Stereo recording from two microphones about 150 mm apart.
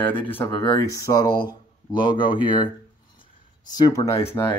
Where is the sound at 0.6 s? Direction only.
20° left (ahead or behind).